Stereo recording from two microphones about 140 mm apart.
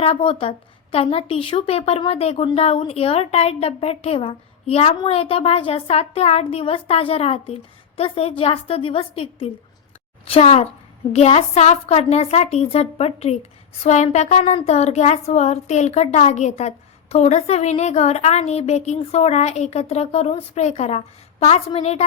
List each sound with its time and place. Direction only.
0.0 s a woman's voice: 40° left (ahead or behind)